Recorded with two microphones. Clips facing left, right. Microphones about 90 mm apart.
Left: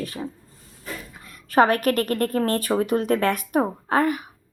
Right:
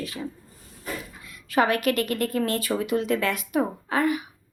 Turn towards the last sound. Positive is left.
turn(degrees=45)  # may be behind; listen again after turning